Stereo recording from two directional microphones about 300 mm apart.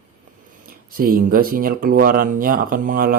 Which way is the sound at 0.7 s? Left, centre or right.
Right.